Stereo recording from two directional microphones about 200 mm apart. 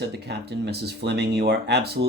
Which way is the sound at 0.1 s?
55° right (ahead or behind).